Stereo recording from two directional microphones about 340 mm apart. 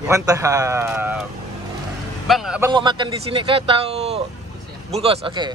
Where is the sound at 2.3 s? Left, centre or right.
Centre.